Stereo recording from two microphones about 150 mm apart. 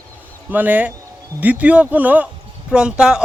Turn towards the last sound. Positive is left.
turn(degrees=-5)  # may be behind; listen again after turning